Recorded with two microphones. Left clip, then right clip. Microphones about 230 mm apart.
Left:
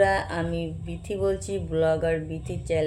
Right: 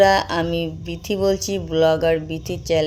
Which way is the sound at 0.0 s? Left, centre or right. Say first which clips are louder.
Right 7 dB; right.